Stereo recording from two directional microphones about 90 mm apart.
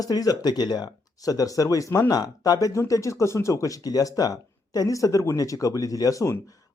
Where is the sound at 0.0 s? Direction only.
45° left (ahead or behind).